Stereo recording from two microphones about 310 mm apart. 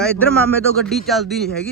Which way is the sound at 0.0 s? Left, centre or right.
Centre.